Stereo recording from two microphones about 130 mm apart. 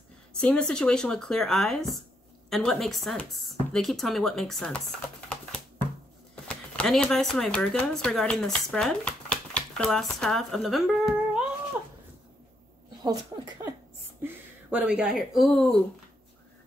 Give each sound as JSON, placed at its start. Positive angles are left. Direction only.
{"t": 0.4, "sound": "speech", "side_deg": 10}
{"t": 6.4, "sound": "speech", "side_deg": 10}
{"t": 13.0, "sound": "speech", "side_deg": -30}
{"t": 14.2, "sound": "speech", "side_deg": -10}